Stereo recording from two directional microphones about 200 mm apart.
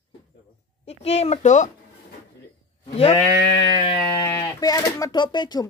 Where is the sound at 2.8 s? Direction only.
30° left (ahead or behind).